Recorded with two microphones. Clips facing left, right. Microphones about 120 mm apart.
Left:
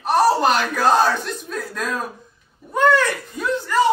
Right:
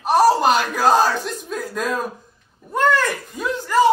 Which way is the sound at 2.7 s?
Centre (ahead or behind).